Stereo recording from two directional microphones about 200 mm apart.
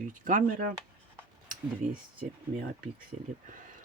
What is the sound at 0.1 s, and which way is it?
Speech, 40° right (ahead or behind).